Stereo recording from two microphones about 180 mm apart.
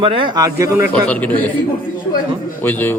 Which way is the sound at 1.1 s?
10° left (ahead or behind).